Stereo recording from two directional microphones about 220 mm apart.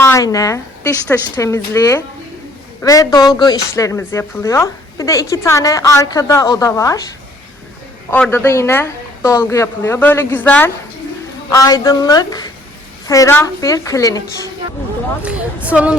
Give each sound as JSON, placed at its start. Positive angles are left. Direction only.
{"t": 0.0, "sound": "speech", "side_deg": 15}
{"t": 8.1, "sound": "speech", "side_deg": 10}
{"t": 15.2, "sound": "a woman's voice", "side_deg": -5}